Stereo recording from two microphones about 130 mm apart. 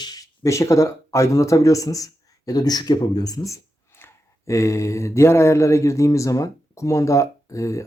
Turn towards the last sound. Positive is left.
turn(degrees=25)  # may be behind; listen again after turning